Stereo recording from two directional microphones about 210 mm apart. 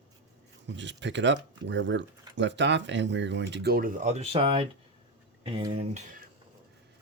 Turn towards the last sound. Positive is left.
turn(degrees=-25)  # may be behind; listen again after turning